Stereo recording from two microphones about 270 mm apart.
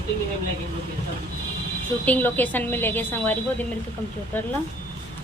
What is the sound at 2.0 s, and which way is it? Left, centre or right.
A woman's voice, centre.